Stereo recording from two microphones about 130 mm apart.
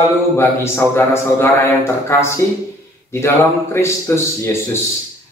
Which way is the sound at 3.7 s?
20° left (ahead or behind).